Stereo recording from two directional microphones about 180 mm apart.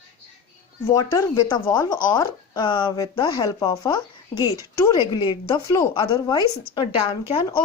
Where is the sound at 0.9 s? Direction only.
15° left (ahead or behind).